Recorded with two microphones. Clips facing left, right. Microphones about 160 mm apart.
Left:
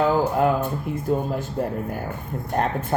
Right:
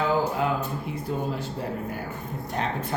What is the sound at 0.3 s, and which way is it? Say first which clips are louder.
Speech: left 6 dB; 50° left (ahead or behind).